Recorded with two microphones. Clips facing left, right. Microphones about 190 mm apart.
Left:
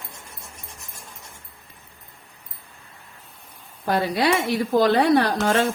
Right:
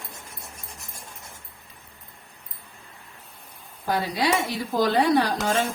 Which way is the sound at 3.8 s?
60° left (ahead or behind).